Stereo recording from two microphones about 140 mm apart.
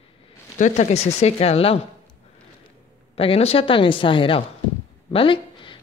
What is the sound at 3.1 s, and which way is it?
Speech, 45° left (ahead or behind).